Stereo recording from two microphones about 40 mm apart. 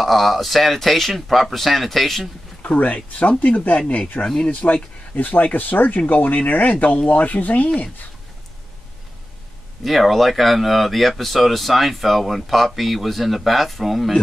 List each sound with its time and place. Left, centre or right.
0.0 s speech: centre
2.6 s speech: left
9.8 s speech: centre